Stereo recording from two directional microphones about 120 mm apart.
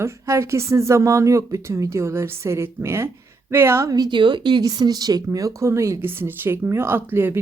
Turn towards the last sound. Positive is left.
turn(degrees=-20)  # may be behind; listen again after turning